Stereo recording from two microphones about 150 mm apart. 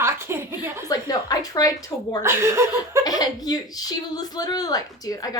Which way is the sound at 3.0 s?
25° left (ahead or behind).